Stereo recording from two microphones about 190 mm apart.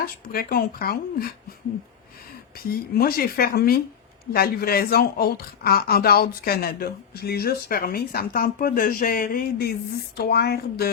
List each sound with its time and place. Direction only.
0.0 s a woman's voice: 50° left (ahead or behind)
2.6 s a woman's voice: 50° left (ahead or behind)